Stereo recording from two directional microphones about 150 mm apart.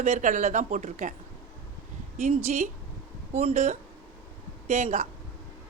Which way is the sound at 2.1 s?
50° right (ahead or behind).